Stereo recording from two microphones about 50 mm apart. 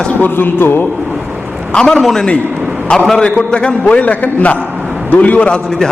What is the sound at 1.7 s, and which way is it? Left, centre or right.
Speech, centre.